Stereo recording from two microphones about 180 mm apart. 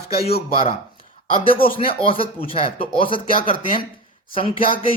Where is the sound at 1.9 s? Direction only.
30° left (ahead or behind).